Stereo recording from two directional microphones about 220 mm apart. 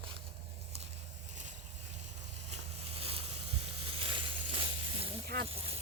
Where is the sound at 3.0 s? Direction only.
25° right (ahead or behind).